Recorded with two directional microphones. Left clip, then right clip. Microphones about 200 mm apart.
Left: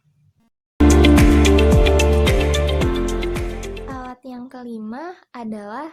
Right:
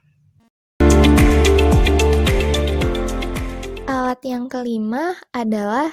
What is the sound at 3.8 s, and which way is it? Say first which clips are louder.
A child's voice: right 11 dB; 40° right (ahead or behind).